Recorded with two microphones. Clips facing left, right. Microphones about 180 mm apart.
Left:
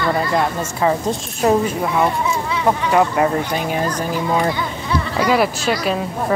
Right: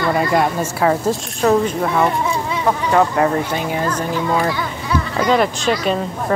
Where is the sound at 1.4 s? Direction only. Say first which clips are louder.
Right 1 dB; 10° left (ahead or behind).